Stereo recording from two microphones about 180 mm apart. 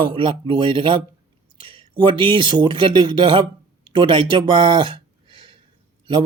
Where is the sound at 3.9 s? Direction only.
25° right (ahead or behind).